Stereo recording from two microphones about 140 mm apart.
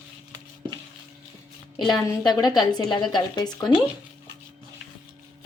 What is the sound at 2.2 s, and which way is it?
Speech, 30° left (ahead or behind).